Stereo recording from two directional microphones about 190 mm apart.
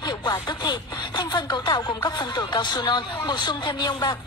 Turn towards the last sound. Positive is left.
turn(degrees=25)  # may be behind; listen again after turning